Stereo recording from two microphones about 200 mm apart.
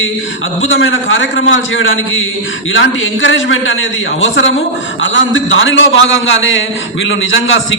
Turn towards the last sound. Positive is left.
turn(degrees=70)  # may be behind; listen again after turning